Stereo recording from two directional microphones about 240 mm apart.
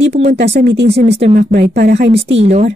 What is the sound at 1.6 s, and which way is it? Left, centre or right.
Speech, right.